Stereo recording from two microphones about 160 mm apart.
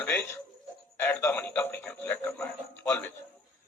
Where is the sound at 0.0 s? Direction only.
10° left (ahead or behind).